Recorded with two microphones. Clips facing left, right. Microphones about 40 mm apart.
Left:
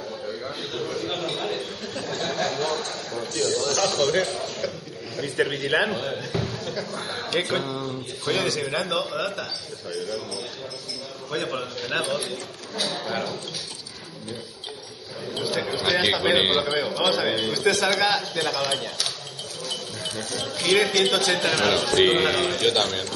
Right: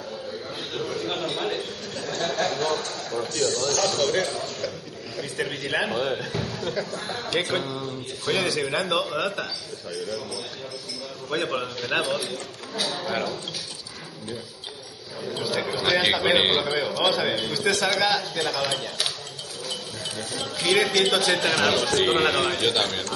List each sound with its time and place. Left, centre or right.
0.6 s a sound: centre
3.3 s a man's voice: centre
3.7 s a man's voice: centre
4.0 s a man's voice: centre
5.9 s a man's voice: centre
6.3 s a sound: centre
6.6 s speech: centre
6.9 s a man's voice: centre
9.1 s a man's voice: centre
11.2 s a man's voice: centre
15.4 s a man's voice: centre
21.9 s a man's voice: centre
22.2 s a man's voice: centre